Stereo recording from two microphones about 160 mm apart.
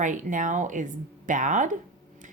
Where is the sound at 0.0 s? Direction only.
50° right (ahead or behind).